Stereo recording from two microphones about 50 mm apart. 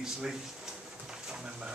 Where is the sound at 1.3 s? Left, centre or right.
Centre.